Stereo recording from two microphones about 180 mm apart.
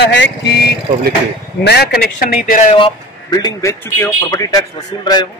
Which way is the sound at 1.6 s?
65° left (ahead or behind).